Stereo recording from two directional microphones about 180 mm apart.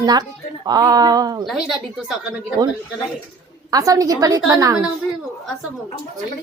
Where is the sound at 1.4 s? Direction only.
Centre (ahead or behind).